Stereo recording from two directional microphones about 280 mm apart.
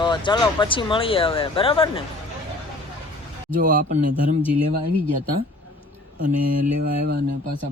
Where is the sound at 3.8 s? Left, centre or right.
Right.